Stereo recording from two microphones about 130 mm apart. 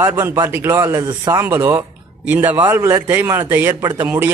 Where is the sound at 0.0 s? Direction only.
20° right (ahead or behind).